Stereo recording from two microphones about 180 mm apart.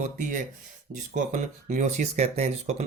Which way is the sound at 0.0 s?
45° right (ahead or behind).